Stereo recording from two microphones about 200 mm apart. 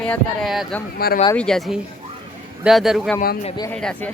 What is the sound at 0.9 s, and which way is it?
Speech, 50° left (ahead or behind).